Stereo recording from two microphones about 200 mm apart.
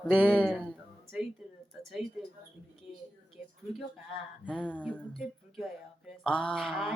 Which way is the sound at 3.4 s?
5° right (ahead or behind).